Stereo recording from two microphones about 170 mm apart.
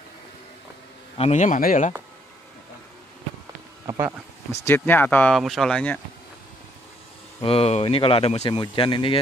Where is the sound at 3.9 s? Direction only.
20° right (ahead or behind).